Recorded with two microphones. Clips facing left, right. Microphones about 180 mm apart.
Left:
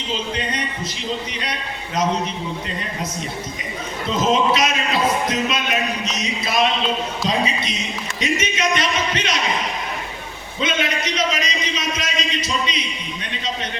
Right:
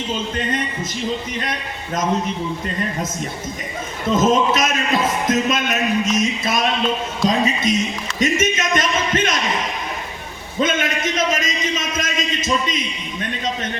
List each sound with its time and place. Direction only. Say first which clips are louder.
4.1 s a man's voice: right 2 dB; 50° right (ahead or behind)
10.6 s a man's voice: right 3 dB; 50° right (ahead or behind)